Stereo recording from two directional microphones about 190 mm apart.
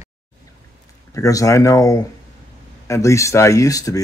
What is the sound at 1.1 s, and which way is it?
Speech, 15° left (ahead or behind).